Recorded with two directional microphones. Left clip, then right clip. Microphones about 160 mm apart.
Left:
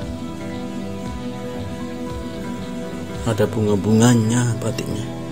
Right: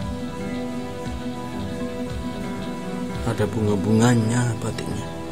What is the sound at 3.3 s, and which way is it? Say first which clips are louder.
Speech: left 5 dB; 10° left (ahead or behind).